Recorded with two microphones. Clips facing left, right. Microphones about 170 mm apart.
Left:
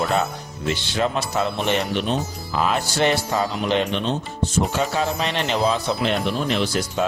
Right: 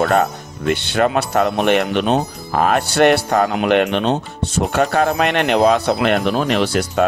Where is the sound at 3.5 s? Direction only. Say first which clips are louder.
Right 6 dB; 70° right (ahead or behind).